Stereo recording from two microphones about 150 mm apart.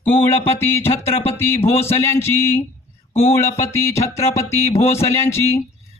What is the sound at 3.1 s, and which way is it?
Speech, 40° left (ahead or behind).